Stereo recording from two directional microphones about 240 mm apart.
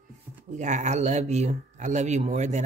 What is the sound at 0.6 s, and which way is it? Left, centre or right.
Speech, right.